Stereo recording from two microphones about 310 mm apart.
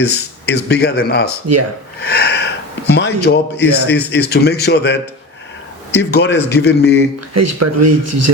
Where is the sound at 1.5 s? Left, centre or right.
Right.